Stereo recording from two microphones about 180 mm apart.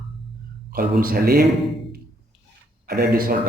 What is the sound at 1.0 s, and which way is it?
Speech, 55° right (ahead or behind).